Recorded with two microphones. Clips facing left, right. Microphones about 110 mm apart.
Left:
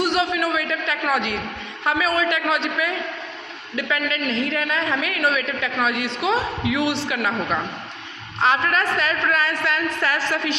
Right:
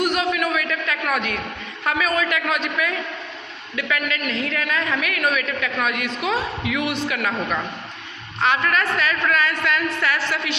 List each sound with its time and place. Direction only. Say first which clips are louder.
0.0 s a woman's voice: even; 25° left (ahead or behind)
8.4 s a woman's voice: left 1 dB; 30° left (ahead or behind)